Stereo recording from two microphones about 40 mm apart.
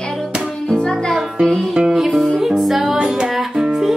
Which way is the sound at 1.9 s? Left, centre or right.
Centre.